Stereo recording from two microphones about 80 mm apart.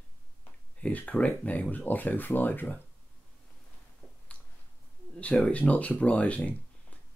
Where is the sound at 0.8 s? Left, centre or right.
Centre.